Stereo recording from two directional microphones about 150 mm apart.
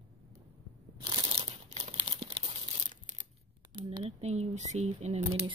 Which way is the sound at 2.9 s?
60° right (ahead or behind).